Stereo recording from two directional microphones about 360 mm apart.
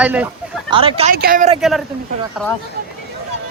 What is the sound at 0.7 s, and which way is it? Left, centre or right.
Speech, centre.